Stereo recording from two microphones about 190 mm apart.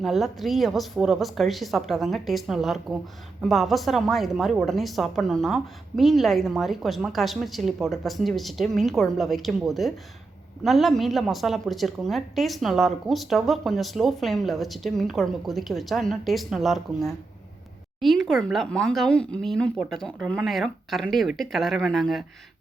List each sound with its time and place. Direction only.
0.0 s a woman's voice: centre (ahead or behind)